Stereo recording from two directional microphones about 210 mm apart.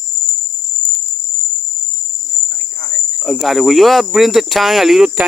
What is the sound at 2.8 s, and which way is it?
Cricket, 55° right (ahead or behind).